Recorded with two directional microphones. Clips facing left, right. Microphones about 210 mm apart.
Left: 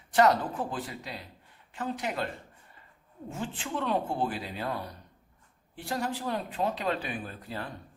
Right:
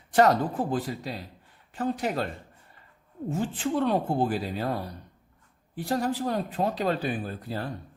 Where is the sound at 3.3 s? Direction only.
40° right (ahead or behind).